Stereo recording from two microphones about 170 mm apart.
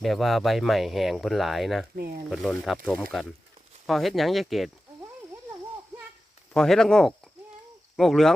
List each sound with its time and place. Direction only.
0.0 s speech: centre (ahead or behind)
2.0 s speech: 60° right (ahead or behind)
2.3 s speech: centre (ahead or behind)
6.5 s speech: 5° left (ahead or behind)